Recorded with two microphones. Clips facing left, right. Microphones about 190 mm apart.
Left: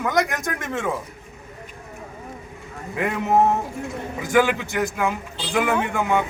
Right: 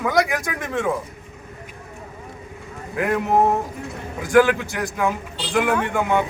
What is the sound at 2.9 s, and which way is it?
Speech, centre (ahead or behind).